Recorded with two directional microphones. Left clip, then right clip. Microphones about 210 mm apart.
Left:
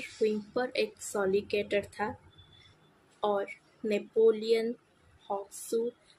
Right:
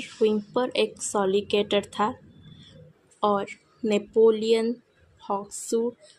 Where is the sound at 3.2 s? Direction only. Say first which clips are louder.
Right 6 dB; 30° right (ahead or behind).